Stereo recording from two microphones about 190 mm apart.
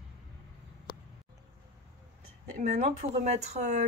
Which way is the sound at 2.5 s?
50° right (ahead or behind).